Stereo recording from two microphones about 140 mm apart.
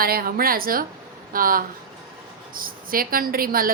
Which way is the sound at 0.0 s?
90° right.